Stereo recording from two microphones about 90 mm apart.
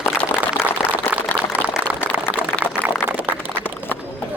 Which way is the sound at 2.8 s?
20° right (ahead or behind).